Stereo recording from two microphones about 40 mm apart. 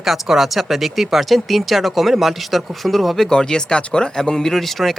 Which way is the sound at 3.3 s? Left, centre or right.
Centre.